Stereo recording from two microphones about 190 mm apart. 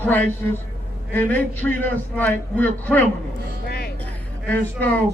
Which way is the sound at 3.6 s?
55° left (ahead or behind).